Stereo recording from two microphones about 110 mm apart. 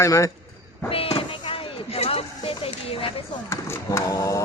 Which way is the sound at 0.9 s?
60° left (ahead or behind).